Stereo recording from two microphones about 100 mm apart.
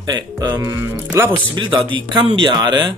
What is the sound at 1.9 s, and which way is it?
Speech, 55° right (ahead or behind).